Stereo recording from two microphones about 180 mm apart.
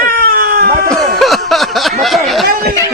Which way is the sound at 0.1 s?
55° right (ahead or behind).